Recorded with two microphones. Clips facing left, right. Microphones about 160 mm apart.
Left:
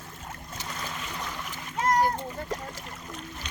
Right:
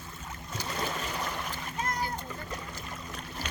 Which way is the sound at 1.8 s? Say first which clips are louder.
Left 10 dB; 90° left.